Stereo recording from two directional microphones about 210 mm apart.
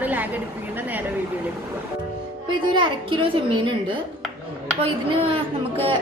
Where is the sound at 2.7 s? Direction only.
25° right (ahead or behind).